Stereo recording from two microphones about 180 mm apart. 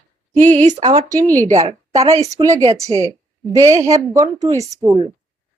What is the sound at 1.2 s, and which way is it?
Speech, 10° left (ahead or behind).